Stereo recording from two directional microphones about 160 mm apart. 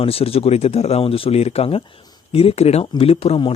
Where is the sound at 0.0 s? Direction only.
35° left (ahead or behind).